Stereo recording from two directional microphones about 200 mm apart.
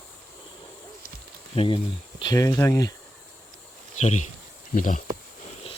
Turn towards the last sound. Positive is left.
turn(degrees=40)  # may be behind; listen again after turning